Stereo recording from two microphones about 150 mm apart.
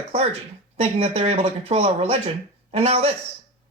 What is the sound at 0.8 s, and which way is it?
Speech, 40° right (ahead or behind).